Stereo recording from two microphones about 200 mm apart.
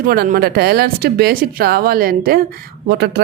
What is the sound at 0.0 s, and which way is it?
A woman's voice, 45° right (ahead or behind).